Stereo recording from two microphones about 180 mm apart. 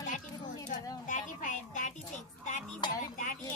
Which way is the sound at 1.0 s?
45° left (ahead or behind).